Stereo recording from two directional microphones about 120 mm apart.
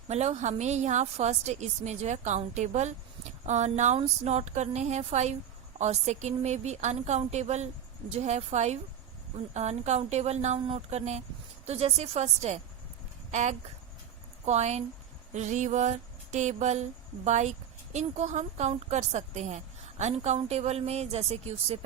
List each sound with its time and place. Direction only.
0.1 s a woman's voice: 65° right (ahead or behind)
13.3 s a woman's voice: 75° right (ahead or behind)
15.3 s a sound: 85° right
17.9 s a woman's voice: 80° right; by 21.8 s 60° right (ahead or behind)